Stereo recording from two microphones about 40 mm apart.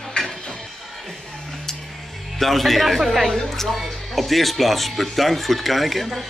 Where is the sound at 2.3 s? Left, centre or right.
Centre.